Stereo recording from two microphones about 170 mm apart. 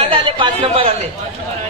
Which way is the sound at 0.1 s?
30° right (ahead or behind).